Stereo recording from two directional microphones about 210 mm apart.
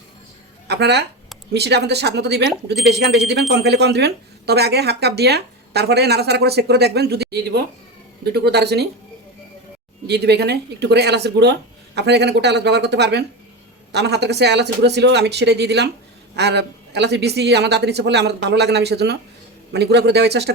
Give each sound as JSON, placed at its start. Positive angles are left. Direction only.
{"t": 0.7, "sound": "speech", "side_deg": -55}
{"t": 10.1, "sound": "speech", "side_deg": -50}